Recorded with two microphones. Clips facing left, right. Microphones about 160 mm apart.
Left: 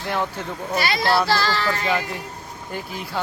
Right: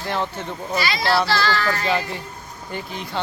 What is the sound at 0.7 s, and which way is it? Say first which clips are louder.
Speech: left 1 dB; 55° left (ahead or behind).